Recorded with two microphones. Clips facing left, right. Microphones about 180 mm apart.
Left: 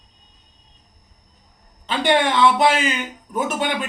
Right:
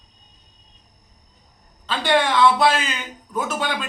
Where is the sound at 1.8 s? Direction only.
20° left (ahead or behind).